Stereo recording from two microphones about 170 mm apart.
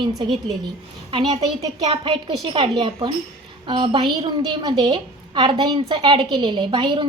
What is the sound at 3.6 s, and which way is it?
A woman's voice, 30° right (ahead or behind).